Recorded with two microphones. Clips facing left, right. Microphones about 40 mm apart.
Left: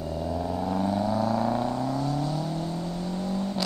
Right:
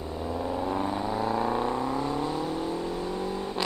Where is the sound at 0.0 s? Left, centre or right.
Right.